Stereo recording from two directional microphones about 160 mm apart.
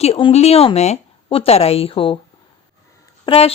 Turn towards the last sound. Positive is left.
turn(degrees=35)  # may be behind; listen again after turning